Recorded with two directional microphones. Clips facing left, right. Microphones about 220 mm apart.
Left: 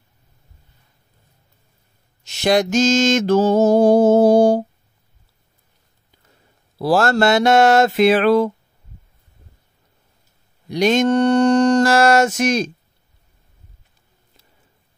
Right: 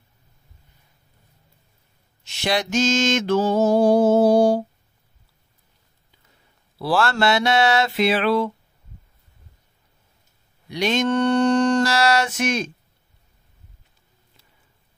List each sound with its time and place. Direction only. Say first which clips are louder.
2.2 s mantra: left 7 dB; 45° left (ahead or behind)
6.8 s mantra: left 5 dB; 45° left (ahead or behind)
10.7 s mantra: left 5 dB; 45° left (ahead or behind)